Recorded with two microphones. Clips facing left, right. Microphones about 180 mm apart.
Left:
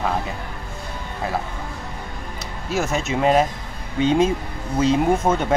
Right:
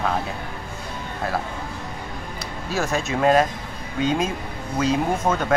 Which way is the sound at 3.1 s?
15° left (ahead or behind).